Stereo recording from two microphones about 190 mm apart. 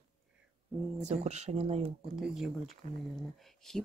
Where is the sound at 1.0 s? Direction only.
35° right (ahead or behind).